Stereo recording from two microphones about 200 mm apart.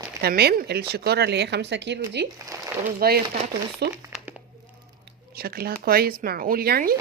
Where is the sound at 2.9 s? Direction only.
50° right (ahead or behind).